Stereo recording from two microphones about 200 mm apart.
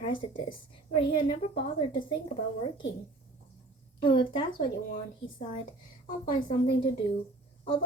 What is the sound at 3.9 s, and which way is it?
Speech, 25° left (ahead or behind).